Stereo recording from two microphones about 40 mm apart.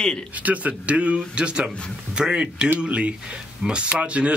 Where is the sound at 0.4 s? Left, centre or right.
Right.